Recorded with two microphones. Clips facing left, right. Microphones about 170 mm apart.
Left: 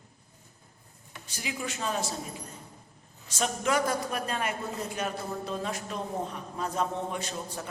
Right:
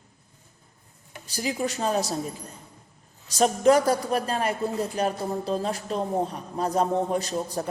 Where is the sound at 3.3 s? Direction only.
35° right (ahead or behind).